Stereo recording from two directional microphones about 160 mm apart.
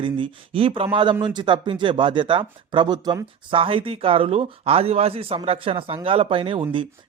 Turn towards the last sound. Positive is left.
turn(degrees=-35)  # may be behind; listen again after turning